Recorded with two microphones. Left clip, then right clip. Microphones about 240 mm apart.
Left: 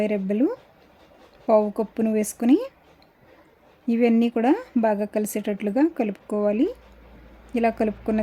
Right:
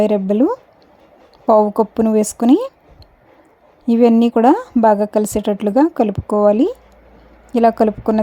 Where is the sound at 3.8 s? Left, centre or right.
Centre.